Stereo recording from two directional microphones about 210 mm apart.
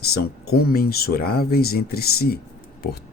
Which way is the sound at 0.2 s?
45° left (ahead or behind).